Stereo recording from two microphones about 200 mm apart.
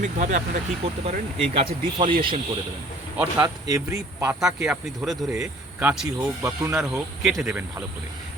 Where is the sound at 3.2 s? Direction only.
15° right (ahead or behind).